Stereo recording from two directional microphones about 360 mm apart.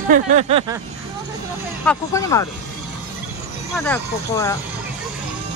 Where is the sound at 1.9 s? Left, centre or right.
Centre.